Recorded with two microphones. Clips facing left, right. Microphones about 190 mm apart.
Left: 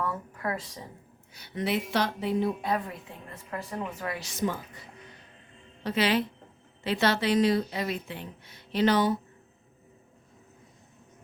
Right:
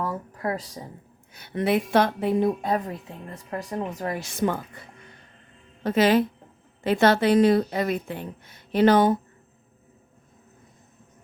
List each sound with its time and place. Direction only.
0.0 s speech: 35° right (ahead or behind)
1.3 s a woman's voice: 55° right (ahead or behind)
5.8 s a woman's voice: 45° right (ahead or behind)